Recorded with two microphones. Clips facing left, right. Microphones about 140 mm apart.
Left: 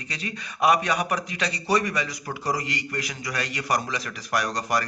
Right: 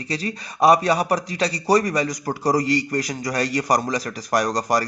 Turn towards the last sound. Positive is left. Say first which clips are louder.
# right 5 dB
turn(degrees=-35)  # may be behind; listen again after turning